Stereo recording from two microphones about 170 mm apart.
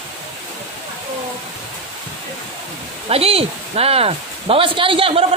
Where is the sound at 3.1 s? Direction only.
35° right (ahead or behind).